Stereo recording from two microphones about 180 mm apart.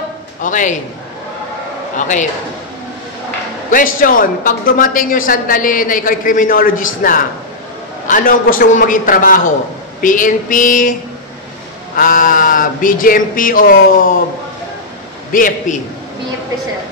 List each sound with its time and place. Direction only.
0.4 s a woman's voice: 45° left (ahead or behind)
2.0 s a woman's voice: 45° left (ahead or behind)
3.7 s a woman's voice: 50° left (ahead or behind)
15.3 s a woman's voice: 50° left (ahead or behind)